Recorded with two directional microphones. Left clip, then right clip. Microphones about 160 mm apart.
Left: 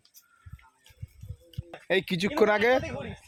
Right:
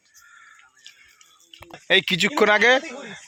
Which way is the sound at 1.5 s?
25° left (ahead or behind).